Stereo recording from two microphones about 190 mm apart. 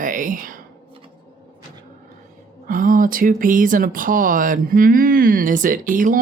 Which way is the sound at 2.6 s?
45° right (ahead or behind).